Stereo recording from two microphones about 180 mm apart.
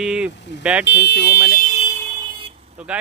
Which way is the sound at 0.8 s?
70° left (ahead or behind).